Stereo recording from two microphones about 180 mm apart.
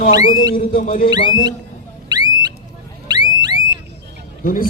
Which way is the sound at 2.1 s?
20° right (ahead or behind).